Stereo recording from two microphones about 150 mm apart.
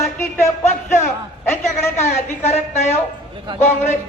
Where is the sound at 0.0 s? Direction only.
20° left (ahead or behind).